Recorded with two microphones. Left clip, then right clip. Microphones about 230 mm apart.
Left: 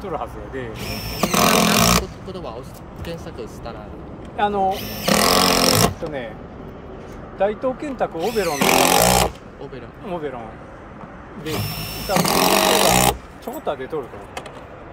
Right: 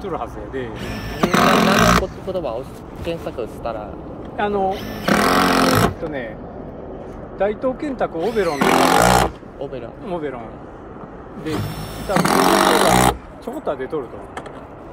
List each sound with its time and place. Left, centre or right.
0.0 s speech: left
0.7 s speech: left
2.3 s speech: centre
4.4 s speech: left
4.6 s speech: left
7.3 s speech: left
8.2 s speech: left
11.4 s speech: left
13.9 s speech: left